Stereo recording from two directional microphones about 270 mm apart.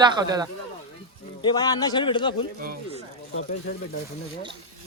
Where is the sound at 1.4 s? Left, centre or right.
Centre.